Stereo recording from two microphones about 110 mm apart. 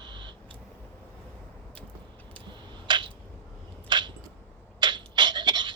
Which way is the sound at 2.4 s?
45° right (ahead or behind).